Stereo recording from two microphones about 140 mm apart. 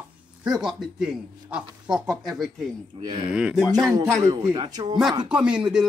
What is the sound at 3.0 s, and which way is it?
Speech, 35° right (ahead or behind).